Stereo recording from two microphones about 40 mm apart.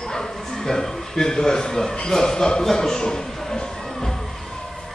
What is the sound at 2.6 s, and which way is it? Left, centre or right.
Music, centre.